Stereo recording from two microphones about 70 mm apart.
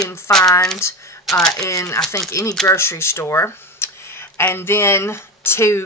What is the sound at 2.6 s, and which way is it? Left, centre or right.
Speech, left.